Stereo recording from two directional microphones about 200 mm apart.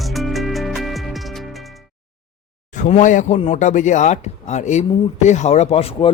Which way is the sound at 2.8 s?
40° left (ahead or behind).